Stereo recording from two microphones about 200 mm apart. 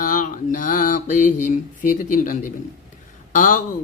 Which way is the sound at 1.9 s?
45° left (ahead or behind).